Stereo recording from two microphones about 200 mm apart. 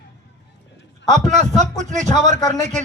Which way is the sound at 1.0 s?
35° right (ahead or behind).